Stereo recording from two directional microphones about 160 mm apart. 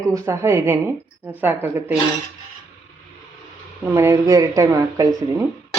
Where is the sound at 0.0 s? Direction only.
20° right (ahead or behind).